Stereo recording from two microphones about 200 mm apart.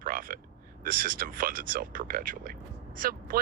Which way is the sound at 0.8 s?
45° right (ahead or behind).